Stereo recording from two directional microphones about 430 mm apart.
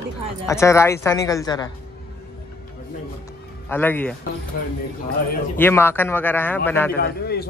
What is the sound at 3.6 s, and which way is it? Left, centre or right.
Speech, centre.